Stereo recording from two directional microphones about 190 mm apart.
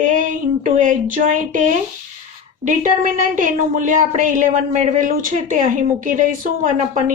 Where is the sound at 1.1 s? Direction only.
45° right (ahead or behind).